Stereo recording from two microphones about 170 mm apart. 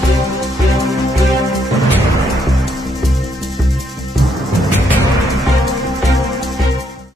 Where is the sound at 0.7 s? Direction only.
Centre (ahead or behind).